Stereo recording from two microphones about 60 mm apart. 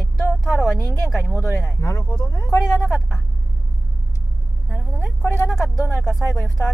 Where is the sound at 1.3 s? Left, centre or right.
Left.